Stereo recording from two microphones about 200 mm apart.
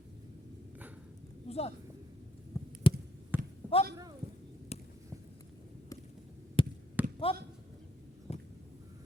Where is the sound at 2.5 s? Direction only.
15° left (ahead or behind).